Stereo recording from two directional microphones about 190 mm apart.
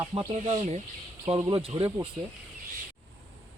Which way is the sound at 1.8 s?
10° right (ahead or behind).